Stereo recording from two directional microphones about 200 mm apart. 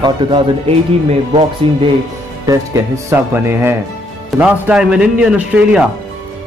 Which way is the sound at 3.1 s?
10° right (ahead or behind).